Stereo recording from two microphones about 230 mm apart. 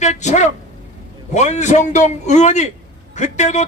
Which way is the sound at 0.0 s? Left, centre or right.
Left.